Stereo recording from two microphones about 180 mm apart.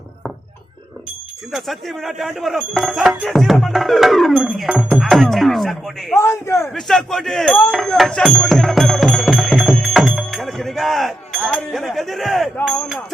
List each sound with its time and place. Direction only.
1.5 s speech: centre (ahead or behind)
6.1 s a man's voice: 15° left (ahead or behind)
6.7 s music: centre (ahead or behind)
12.6 s speech: centre (ahead or behind)